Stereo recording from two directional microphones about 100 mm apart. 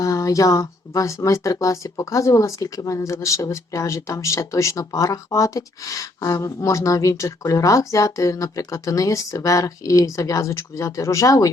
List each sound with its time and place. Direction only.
0.0 s speech: 35° left (ahead or behind)